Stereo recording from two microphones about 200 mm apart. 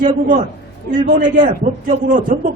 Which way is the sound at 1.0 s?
40° right (ahead or behind).